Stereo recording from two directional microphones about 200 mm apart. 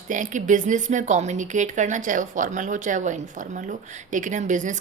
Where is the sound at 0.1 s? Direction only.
40° right (ahead or behind).